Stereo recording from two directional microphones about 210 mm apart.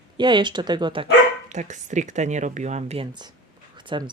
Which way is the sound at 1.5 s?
35° right (ahead or behind).